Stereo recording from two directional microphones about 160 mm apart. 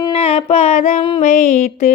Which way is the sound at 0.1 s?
35° left (ahead or behind).